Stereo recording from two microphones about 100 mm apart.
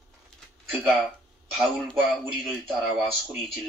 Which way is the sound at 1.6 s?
Centre (ahead or behind).